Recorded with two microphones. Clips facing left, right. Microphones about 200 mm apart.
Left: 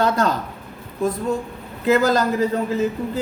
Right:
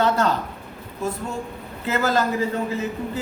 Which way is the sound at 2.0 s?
40° left (ahead or behind).